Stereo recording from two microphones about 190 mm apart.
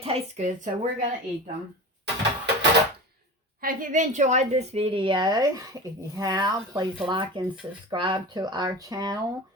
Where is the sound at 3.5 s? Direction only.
45° right (ahead or behind); by 9.2 s 20° right (ahead or behind).